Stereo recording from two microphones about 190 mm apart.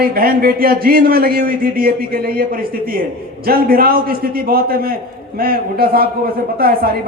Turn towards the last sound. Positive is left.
turn(degrees=-50)  # may be behind; listen again after turning